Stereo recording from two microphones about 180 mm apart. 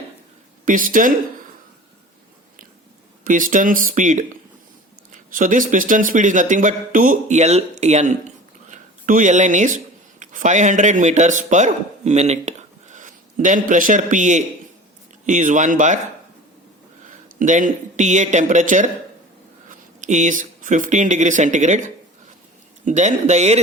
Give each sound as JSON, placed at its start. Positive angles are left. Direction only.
{"t": 0.6, "sound": "a man's voice", "side_deg": -50}
{"t": 3.2, "sound": "a man's voice", "side_deg": -45}
{"t": 17.1, "sound": "speech", "side_deg": -45}